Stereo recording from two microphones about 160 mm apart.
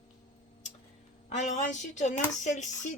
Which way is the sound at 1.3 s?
50° left (ahead or behind).